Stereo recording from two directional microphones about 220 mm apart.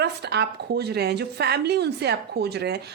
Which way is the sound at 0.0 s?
50° right (ahead or behind).